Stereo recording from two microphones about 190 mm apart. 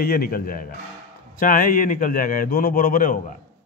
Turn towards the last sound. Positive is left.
turn(degrees=50)  # may be behind; listen again after turning